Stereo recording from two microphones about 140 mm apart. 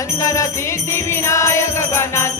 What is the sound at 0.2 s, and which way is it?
Music, 20° left (ahead or behind).